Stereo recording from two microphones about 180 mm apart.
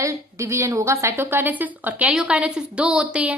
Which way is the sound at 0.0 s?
15° right (ahead or behind).